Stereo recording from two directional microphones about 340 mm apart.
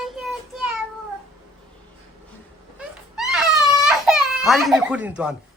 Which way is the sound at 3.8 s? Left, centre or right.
Centre.